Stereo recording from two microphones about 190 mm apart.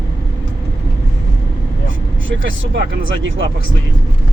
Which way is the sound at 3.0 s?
80° right.